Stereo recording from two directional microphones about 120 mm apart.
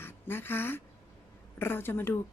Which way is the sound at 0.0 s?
20° left (ahead or behind).